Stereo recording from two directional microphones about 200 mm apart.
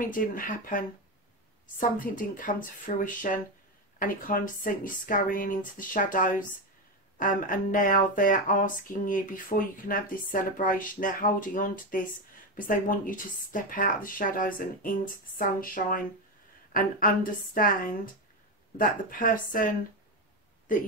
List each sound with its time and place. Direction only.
0.0 s speech: 45° left (ahead or behind)